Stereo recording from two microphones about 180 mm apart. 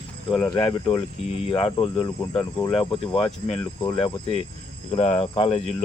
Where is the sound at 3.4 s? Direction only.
30° left (ahead or behind).